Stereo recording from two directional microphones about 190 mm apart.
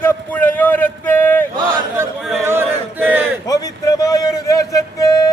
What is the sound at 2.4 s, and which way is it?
Battle cry, 10° right (ahead or behind).